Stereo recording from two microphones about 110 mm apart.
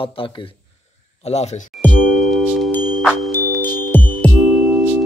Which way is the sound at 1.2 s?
75° left (ahead or behind).